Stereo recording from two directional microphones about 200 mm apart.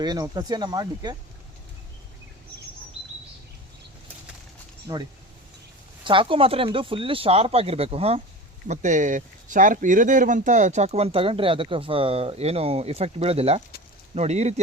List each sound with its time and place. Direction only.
0.0 s speech: 20° right (ahead or behind)
4.9 s speech: 20° right (ahead or behind)
6.1 s speech: 25° right (ahead or behind)